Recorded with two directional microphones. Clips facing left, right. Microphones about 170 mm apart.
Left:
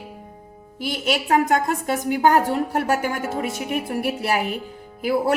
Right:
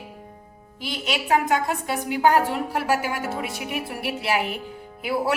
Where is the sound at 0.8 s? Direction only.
50° left (ahead or behind).